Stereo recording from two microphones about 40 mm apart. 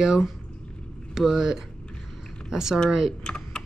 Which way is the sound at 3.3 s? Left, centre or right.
Centre.